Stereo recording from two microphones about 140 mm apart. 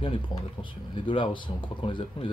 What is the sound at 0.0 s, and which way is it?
Speech, 40° left (ahead or behind).